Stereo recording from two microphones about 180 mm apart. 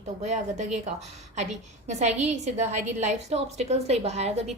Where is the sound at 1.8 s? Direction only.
40° right (ahead or behind).